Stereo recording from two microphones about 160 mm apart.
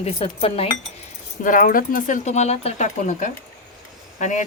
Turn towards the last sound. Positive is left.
turn(degrees=50)  # may be behind; listen again after turning